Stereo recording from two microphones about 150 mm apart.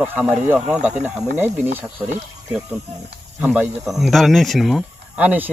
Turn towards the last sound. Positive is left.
turn(degrees=-10)  # may be behind; listen again after turning